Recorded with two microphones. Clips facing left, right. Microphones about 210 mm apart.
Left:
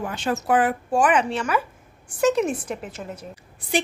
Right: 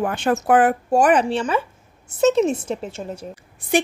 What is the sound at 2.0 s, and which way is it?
A woman's voice, 25° right (ahead or behind).